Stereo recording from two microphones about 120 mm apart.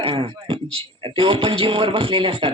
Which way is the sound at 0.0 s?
45° right (ahead or behind).